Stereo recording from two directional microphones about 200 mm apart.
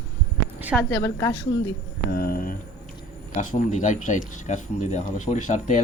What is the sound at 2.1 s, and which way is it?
Speech, 50° left (ahead or behind).